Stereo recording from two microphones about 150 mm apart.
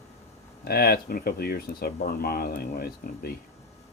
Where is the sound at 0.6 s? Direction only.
90° left.